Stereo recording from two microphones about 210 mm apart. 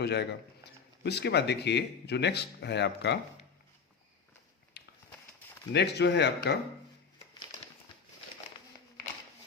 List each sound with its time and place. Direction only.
0.0 s speech: 55° left (ahead or behind)
5.7 s speech: 55° left (ahead or behind)